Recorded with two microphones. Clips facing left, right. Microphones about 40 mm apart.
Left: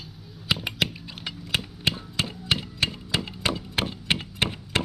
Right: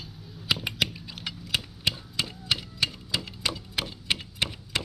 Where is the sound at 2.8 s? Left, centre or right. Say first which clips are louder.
Left 2 dB; left.